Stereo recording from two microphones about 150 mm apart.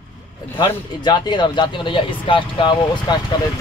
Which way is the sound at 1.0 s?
30° left (ahead or behind).